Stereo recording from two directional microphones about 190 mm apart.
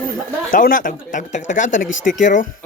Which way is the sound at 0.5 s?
45° left (ahead or behind).